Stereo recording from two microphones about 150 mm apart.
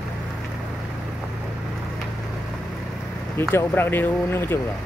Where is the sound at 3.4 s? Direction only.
15° left (ahead or behind).